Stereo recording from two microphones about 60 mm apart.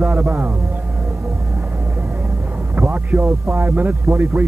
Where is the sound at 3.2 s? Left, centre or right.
Right.